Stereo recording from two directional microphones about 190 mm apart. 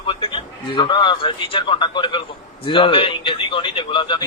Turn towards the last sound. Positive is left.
turn(degrees=25)  # may be behind; listen again after turning